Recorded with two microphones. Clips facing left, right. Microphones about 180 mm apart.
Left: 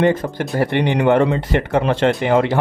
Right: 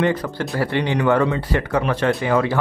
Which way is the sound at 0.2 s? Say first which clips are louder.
Left 3 dB; 20° left (ahead or behind).